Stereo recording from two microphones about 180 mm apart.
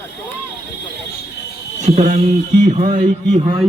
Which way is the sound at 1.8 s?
40° right (ahead or behind).